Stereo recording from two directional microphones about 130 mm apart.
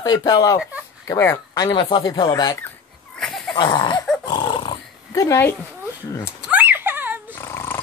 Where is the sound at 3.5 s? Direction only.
35° left (ahead or behind).